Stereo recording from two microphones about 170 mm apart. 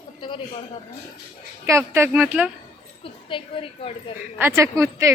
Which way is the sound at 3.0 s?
30° left (ahead or behind).